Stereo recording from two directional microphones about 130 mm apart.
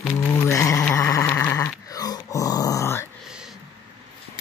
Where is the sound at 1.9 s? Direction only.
30° left (ahead or behind).